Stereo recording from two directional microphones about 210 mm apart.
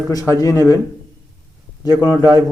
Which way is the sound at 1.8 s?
20° left (ahead or behind).